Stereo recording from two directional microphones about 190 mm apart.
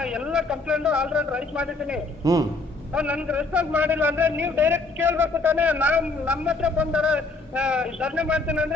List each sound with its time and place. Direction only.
0.0 s a man's voice: 5° right (ahead or behind)
2.2 s a woman's voice: 20° right (ahead or behind)
2.9 s a man's voice: 5° right (ahead or behind)